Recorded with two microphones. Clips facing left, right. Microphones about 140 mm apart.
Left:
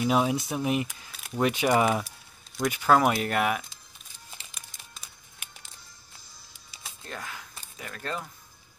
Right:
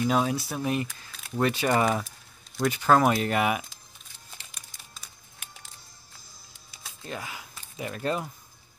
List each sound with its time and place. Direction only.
0.0 s speech: 15° left (ahead or behind); by 3.6 s 5° right (ahead or behind)
7.1 s speech: 5° right (ahead or behind)
7.8 s speech: 20° right (ahead or behind)